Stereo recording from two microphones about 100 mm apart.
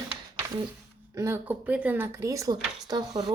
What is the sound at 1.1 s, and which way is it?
Speech, 30° right (ahead or behind).